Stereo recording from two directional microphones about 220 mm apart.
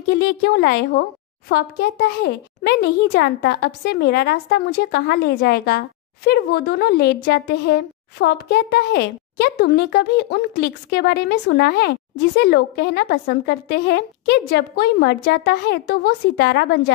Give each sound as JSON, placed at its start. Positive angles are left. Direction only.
{"t": 0.2, "sound": "speech", "side_deg": 45}